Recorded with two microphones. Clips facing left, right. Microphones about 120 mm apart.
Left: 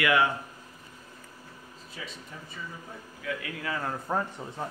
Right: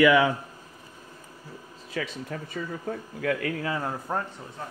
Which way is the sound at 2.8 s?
60° right (ahead or behind).